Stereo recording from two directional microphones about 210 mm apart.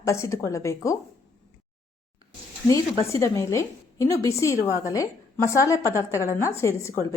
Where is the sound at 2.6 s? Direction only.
15° left (ahead or behind).